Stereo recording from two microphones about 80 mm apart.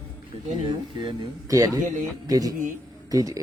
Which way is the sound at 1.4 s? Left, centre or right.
Right.